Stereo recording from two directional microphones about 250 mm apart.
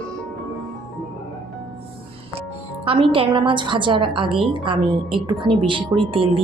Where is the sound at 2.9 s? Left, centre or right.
Right.